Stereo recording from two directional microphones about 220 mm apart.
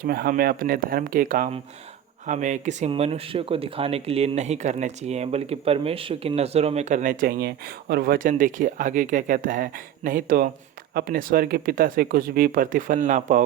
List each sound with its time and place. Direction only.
0.0 s speech: 45° right (ahead or behind)